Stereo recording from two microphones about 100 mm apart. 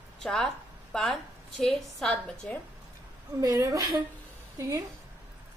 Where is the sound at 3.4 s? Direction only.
35° right (ahead or behind).